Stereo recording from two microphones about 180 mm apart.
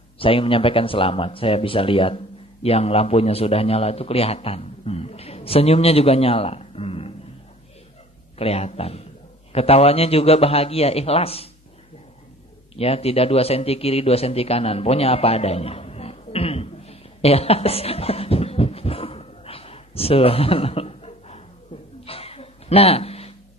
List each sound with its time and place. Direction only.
0.2 s a man's voice: 30° left (ahead or behind)
8.4 s speech: 35° left (ahead or behind)
12.7 s a man's voice: 35° left (ahead or behind)
22.0 s a sound: 30° left (ahead or behind)